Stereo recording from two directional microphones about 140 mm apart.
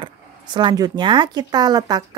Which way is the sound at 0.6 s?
30° right (ahead or behind).